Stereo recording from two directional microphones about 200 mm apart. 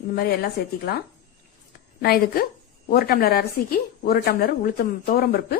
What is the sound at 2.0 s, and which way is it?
Speech, 50° left (ahead or behind).